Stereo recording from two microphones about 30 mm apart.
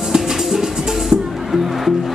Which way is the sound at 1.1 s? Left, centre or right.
Right.